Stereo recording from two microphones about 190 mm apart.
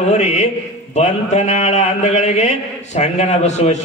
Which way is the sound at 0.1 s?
35° left (ahead or behind).